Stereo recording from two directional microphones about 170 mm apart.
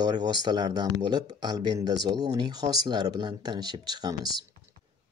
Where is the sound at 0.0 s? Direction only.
25° right (ahead or behind).